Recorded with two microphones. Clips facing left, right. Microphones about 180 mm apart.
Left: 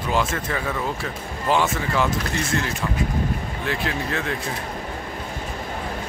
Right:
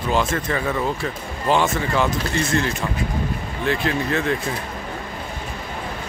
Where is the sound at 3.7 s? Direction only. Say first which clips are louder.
Right 5 dB; 5° left (ahead or behind).